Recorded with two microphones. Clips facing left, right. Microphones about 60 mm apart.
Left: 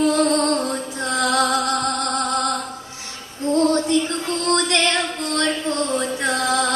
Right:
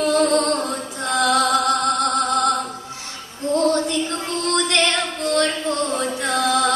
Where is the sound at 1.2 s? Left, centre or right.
Left.